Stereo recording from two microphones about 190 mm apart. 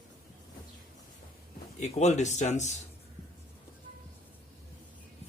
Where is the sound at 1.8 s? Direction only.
35° left (ahead or behind).